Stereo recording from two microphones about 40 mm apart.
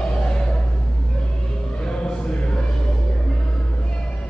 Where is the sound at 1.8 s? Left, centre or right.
Centre.